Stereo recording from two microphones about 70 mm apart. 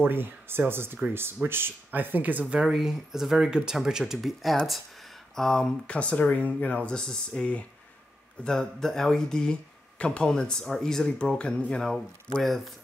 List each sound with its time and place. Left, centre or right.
0.0 s speech: right
2.6 s speech: centre
11.9 s speech: centre